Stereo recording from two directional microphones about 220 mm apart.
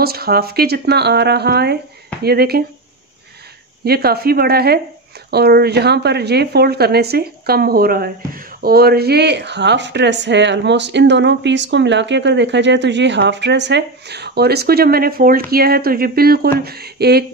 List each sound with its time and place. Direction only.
0.0 s speech: 45° right (ahead or behind)
3.8 s speech: 45° right (ahead or behind)